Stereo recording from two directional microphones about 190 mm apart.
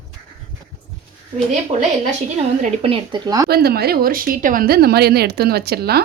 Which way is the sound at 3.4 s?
55° right (ahead or behind).